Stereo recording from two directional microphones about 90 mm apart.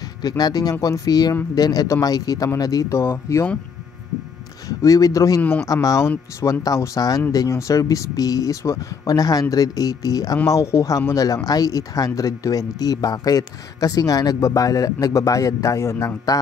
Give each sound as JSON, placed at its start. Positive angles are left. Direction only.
{"t": 0.2, "sound": "speech", "side_deg": 45}
{"t": 4.6, "sound": "speech", "side_deg": 40}
{"t": 5.4, "sound": "speech", "side_deg": 15}
{"t": 5.7, "sound": "speech", "side_deg": 40}